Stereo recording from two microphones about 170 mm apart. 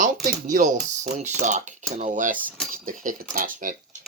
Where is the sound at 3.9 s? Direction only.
45° right (ahead or behind).